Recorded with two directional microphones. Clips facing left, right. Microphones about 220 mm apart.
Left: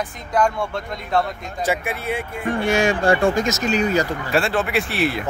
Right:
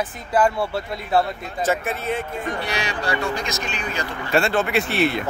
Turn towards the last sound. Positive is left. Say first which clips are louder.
# right 1 dB
turn(degrees=0)  # may be behind; listen again after turning